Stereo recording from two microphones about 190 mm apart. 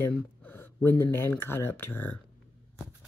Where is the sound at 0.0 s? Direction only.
10° left (ahead or behind).